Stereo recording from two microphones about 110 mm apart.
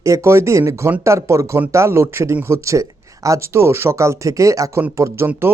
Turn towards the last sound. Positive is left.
turn(degrees=-20)  # may be behind; listen again after turning